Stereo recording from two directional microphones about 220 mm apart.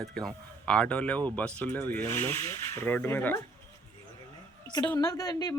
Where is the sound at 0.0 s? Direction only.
5° left (ahead or behind).